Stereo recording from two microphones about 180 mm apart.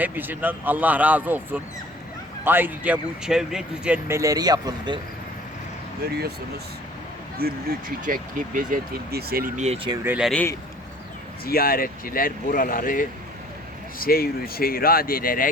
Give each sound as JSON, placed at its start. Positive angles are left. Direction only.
{"t": 0.0, "sound": "speech", "side_deg": -10}
{"t": 4.2, "sound": "speech", "side_deg": -20}
{"t": 7.3, "sound": "speech", "side_deg": -55}
{"t": 9.6, "sound": "speech", "side_deg": -30}
{"t": 10.0, "sound": "speech", "side_deg": -10}
{"t": 10.2, "sound": "a man's voice", "side_deg": 5}
{"t": 11.4, "sound": "speech", "side_deg": 55}